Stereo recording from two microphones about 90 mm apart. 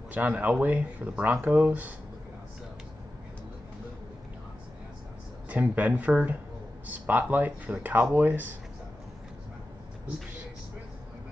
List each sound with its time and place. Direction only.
0.1 s speech: 15° right (ahead or behind)
5.5 s speech: 20° right (ahead or behind)